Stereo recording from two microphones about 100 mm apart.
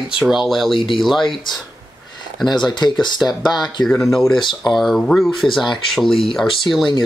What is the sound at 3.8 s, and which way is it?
Speech, centre (ahead or behind).